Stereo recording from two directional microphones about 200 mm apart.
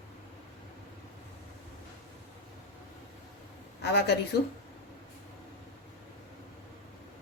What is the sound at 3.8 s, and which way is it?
Speech, 55° left (ahead or behind).